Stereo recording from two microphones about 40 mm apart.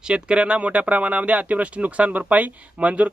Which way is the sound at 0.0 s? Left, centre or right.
Right.